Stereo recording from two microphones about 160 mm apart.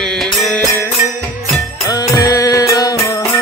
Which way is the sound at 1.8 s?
25° left (ahead or behind).